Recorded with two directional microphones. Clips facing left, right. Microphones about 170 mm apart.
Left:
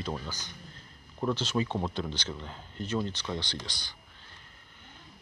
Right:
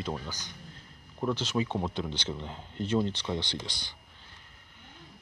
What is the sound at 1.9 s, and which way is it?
Speech, 20° right (ahead or behind).